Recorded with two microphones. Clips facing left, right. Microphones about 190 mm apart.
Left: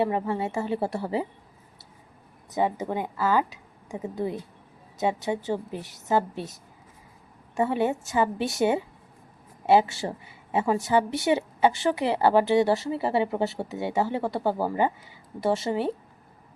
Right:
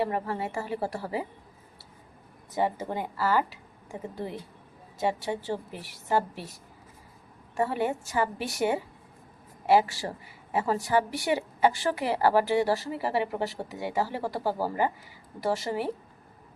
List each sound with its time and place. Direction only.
0.0 s a woman's voice: 20° left (ahead or behind)
2.6 s a woman's voice: 15° left (ahead or behind)
7.5 s a woman's voice: 20° left (ahead or behind)